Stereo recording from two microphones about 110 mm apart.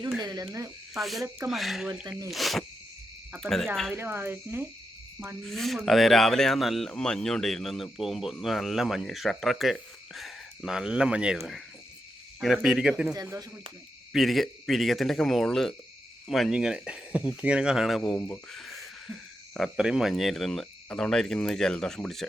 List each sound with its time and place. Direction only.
0.2 s frog: 40° right (ahead or behind)
0.9 s speech: centre (ahead or behind)
2.0 s speech: 35° right (ahead or behind)
2.3 s speech: centre (ahead or behind)
3.9 s speech: 20° right (ahead or behind)
5.4 s speech: 5° left (ahead or behind)
12.6 s speech: 5° right (ahead or behind)